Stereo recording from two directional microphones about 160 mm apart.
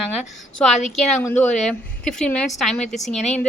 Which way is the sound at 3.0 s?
45° left (ahead or behind).